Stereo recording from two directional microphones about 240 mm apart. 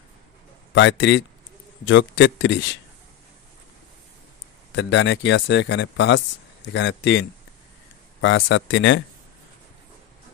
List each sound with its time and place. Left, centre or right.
0.7 s speech: left
4.7 s speech: left